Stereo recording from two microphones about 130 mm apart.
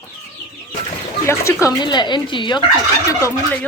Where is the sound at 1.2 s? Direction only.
20° left (ahead or behind).